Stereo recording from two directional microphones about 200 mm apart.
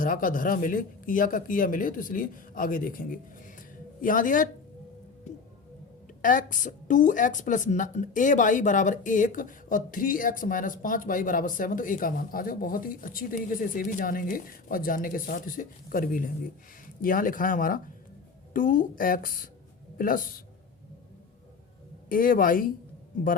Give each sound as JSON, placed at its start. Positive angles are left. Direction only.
{"t": 0.0, "sound": "a woman's voice", "side_deg": 45}
{"t": 6.2, "sound": "a woman's voice", "side_deg": 40}
{"t": 22.1, "sound": "speech", "side_deg": 45}